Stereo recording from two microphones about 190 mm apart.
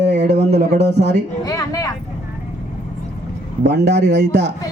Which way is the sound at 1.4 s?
15° left (ahead or behind).